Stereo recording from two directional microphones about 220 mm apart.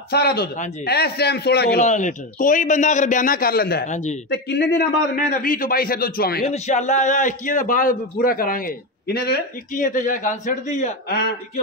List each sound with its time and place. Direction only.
0.1 s a man's voice: 45° left (ahead or behind)
1.8 s a man's voice: 35° left (ahead or behind)
4.3 s a man's voice: 45° left (ahead or behind)
6.4 s a man's voice: 30° left (ahead or behind)